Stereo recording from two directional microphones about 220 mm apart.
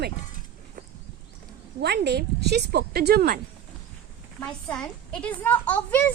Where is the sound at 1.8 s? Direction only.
50° right (ahead or behind).